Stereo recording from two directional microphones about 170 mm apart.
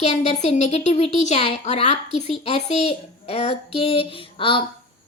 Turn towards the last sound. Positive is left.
turn(degrees=30)  # may be behind; listen again after turning